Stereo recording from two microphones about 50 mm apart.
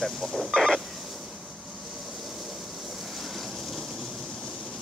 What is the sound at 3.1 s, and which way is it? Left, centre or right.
Vehicle, centre.